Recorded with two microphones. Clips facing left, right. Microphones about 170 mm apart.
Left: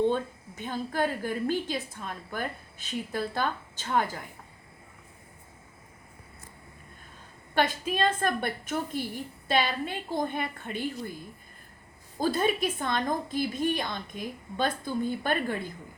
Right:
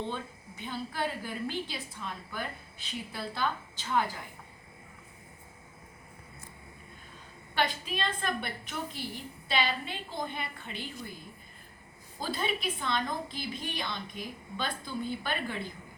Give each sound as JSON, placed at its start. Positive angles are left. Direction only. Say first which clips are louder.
{"t": 0.1, "sound": "a woman's voice", "louder": "left 8 dB", "side_deg": 45}
{"t": 7.5, "sound": "a woman's voice", "louder": "left 5 dB", "side_deg": 45}
{"t": 12.2, "sound": "a woman's voice", "louder": "left 7 dB", "side_deg": 45}